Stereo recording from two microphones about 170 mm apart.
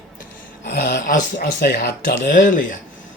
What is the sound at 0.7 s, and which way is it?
Speech, 75° left (ahead or behind).